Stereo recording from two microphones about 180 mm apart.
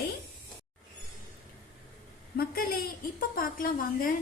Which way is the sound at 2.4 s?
55° left (ahead or behind).